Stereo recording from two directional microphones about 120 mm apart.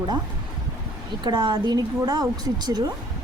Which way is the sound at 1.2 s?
40° right (ahead or behind).